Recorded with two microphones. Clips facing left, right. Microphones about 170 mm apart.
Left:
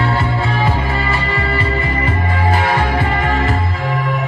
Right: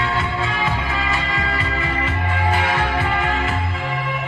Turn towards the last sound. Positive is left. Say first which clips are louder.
# left 4 dB
turn(degrees=40)  # may be behind; listen again after turning